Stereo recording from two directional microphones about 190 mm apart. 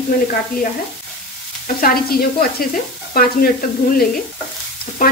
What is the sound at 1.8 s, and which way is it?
Stir, 50° left (ahead or behind).